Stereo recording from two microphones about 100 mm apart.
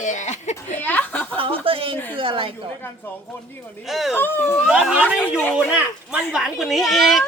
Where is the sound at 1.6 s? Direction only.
65° right (ahead or behind).